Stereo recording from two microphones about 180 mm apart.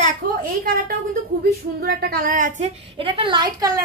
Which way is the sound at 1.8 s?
60° right (ahead or behind).